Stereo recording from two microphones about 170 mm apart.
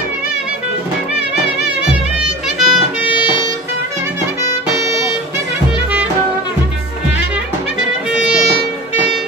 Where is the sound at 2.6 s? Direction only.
Centre (ahead or behind).